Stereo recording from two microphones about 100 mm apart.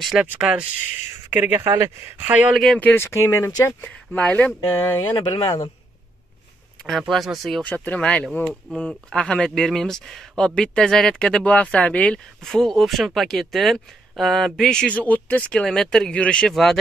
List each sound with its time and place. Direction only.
0.0 s speech: centre (ahead or behind); by 2.1 s 25° right (ahead or behind)
2.1 s speech: 15° right (ahead or behind)
2.5 s speech: centre (ahead or behind)
2.8 s speech: 25° left (ahead or behind)
4.1 s speech: 15° left (ahead or behind)
5.1 s speech: 50° left (ahead or behind)
6.9 s speech: centre (ahead or behind)
7.6 s speech: 20° left (ahead or behind)